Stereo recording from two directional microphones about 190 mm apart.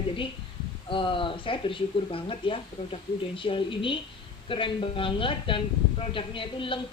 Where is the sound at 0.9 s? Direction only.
25° left (ahead or behind).